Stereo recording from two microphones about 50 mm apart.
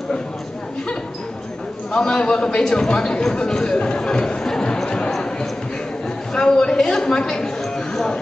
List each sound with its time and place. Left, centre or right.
1.9 s a man's voice: centre
4.8 s a sound: centre
6.3 s speech: centre